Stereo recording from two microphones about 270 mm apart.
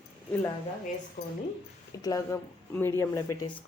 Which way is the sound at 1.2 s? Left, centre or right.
Left.